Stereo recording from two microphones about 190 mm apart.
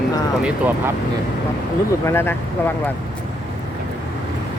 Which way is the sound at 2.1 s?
10° left (ahead or behind).